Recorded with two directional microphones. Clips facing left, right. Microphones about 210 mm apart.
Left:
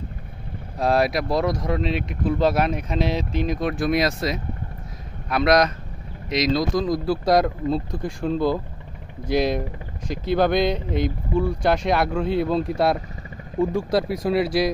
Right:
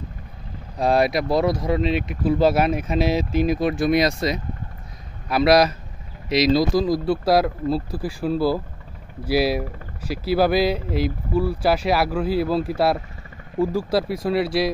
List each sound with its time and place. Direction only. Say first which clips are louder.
0.7 s speech: right 1 dB; centre (ahead or behind)